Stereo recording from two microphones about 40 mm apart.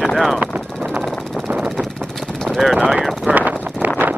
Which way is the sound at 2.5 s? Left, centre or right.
Centre.